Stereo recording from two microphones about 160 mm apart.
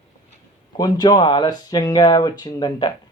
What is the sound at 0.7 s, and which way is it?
Speech, 25° left (ahead or behind).